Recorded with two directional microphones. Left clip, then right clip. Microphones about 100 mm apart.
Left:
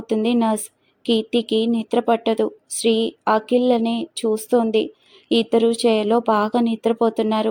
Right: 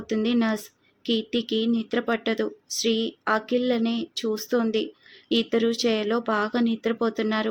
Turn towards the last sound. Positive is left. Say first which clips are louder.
# left 6 dB
turn(degrees=35)  # may be behind; listen again after turning